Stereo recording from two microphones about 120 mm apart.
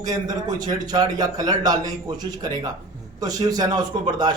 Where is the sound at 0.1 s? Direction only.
35° right (ahead or behind).